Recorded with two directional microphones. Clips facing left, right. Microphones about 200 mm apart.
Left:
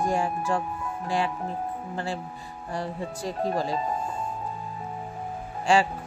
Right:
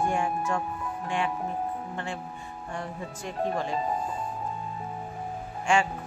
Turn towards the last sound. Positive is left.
turn(degrees=35)  # may be behind; listen again after turning